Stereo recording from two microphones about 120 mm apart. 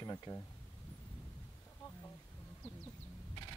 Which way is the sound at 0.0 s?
30° left (ahead or behind).